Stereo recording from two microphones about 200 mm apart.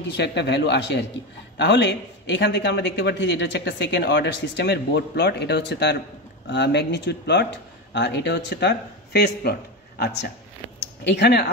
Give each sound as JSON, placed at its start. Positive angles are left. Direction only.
{"t": 0.2, "sound": "a man's voice", "side_deg": 60}